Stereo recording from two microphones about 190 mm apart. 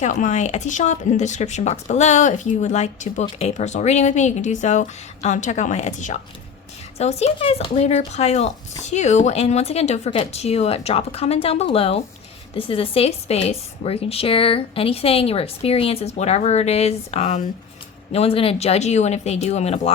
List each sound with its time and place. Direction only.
0.0 s speech: 40° left (ahead or behind)